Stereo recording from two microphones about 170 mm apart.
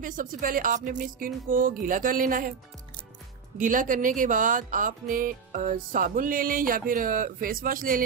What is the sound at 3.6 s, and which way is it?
Speech, 50° right (ahead or behind).